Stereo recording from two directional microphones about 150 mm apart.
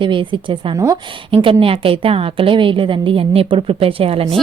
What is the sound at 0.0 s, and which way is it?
A woman's voice, 35° right (ahead or behind).